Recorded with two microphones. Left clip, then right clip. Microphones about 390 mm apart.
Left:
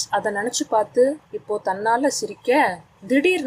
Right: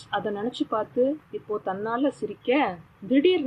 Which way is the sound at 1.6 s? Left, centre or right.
Left.